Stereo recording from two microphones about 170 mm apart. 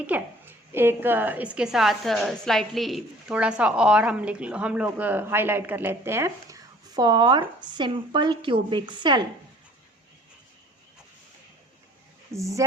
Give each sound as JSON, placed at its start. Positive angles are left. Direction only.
{"t": 0.1, "sound": "a woman's voice", "side_deg": -10}
{"t": 12.3, "sound": "a woman's voice", "side_deg": -20}